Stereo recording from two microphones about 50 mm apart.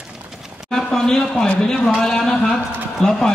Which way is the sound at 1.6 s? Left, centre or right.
Centre.